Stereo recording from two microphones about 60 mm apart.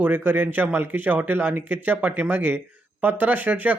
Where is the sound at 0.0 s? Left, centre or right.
Right.